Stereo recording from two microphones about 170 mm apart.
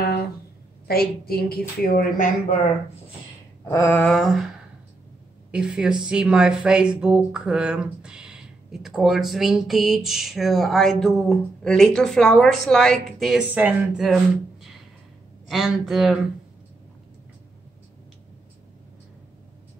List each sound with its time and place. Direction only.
0.8 s a woman's voice: 65° left (ahead or behind)
3.6 s a sound: 15° left (ahead or behind)
5.5 s speech: 5° right (ahead or behind)